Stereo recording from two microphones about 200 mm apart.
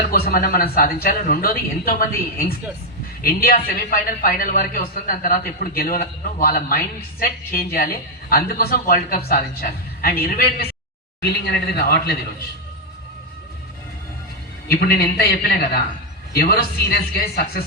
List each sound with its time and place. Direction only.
0.1 s a woman's voice: 45° left (ahead or behind)
14.7 s a woman's voice: 50° left (ahead or behind)
16.3 s a woman's voice: 50° left (ahead or behind)